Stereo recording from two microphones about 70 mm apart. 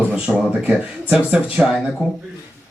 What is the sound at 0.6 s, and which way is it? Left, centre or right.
Speech, centre.